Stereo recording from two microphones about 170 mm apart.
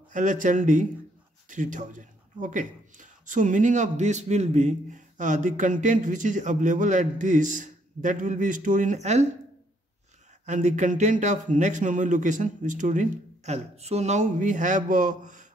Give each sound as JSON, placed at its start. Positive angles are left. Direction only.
{"t": 0.1, "sound": "a man's voice", "side_deg": -50}
{"t": 10.4, "sound": "a man's voice", "side_deg": -45}